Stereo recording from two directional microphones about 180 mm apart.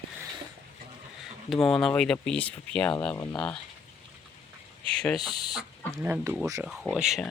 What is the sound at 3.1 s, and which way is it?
Speech, 15° left (ahead or behind).